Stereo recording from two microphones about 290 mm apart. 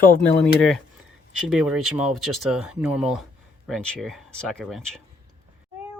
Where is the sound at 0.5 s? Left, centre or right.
Centre.